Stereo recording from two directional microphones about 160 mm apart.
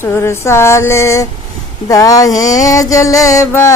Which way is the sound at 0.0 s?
15° left (ahead or behind).